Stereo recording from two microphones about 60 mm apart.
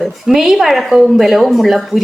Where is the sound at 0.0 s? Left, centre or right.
Centre.